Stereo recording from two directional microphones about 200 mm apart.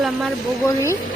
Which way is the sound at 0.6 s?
15° left (ahead or behind).